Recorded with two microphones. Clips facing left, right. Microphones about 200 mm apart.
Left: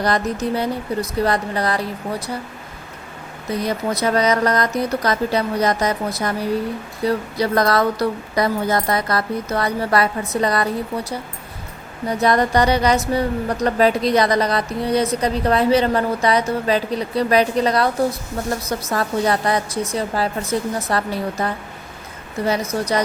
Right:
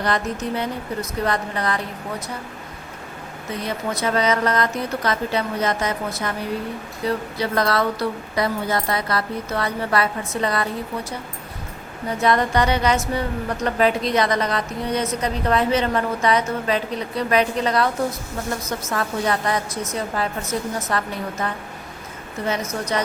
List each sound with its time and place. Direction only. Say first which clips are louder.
0.0 s speech: left 3 dB; 35° left (ahead or behind)
3.6 s speech: left 4 dB; 40° left (ahead or behind)
12.2 s speech: left 2 dB; 40° left (ahead or behind)